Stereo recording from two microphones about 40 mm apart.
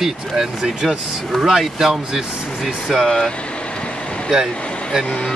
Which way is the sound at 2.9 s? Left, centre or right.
Centre.